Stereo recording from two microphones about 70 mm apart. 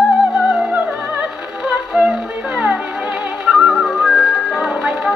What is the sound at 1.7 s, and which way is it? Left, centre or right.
Music, centre.